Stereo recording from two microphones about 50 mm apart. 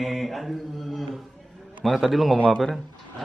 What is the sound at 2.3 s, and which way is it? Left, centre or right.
Speech, left.